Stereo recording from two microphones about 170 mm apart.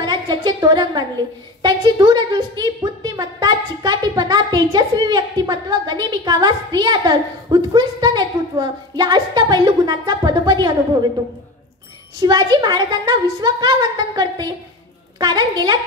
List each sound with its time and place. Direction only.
0.0 s a sound: 25° right (ahead or behind)
1.6 s a woman's voice: 25° right (ahead or behind)
12.2 s a woman's voice: 20° right (ahead or behind)